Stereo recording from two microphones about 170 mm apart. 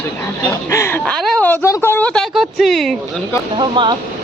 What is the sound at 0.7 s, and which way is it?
Speech, 15° left (ahead or behind).